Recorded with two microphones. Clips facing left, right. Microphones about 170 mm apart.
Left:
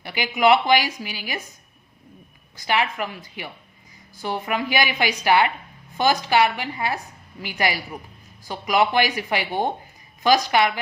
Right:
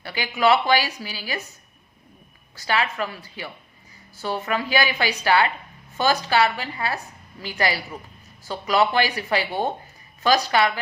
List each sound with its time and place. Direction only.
0.0 s a woman's voice: 15° left (ahead or behind)
2.6 s a woman's voice: 15° left (ahead or behind)